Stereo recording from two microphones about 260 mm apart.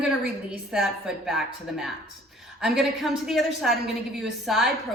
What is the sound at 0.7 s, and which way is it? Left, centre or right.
A woman's voice, centre.